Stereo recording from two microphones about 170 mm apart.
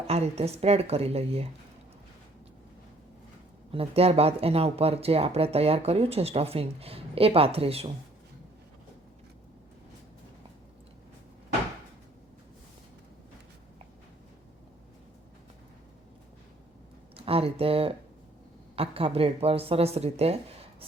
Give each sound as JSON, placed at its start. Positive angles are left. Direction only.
{"t": 0.1, "sound": "speech", "side_deg": -40}
{"t": 3.7, "sound": "speech", "side_deg": -35}
{"t": 17.2, "sound": "speech", "side_deg": -35}